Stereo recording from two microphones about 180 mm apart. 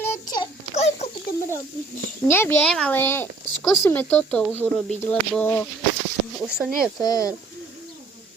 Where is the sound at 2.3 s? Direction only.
10° left (ahead or behind).